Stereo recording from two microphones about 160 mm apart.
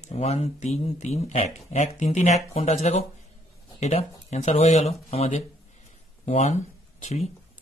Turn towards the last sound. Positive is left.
turn(degrees=45)  # may be behind; listen again after turning